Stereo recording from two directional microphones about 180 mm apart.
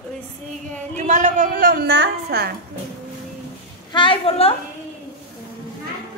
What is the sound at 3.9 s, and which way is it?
Speech, 30° left (ahead or behind).